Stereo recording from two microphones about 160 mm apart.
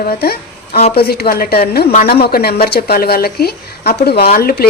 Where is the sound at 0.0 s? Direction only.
70° left (ahead or behind); by 4.3 s 90° left.